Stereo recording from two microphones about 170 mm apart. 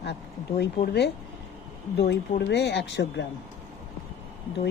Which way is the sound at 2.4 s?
85° left.